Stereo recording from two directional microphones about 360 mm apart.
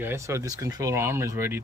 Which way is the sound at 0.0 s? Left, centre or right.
Centre.